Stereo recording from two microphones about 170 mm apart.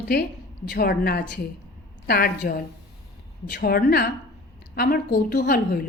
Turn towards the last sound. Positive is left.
turn(degrees=60)  # may be behind; listen again after turning